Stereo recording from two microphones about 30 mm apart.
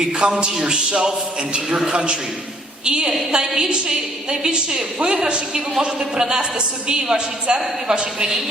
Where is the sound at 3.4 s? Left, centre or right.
Centre; by 5.2 s right.